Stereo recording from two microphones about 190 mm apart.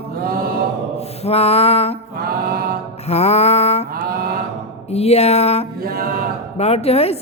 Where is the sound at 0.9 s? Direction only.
35° left (ahead or behind).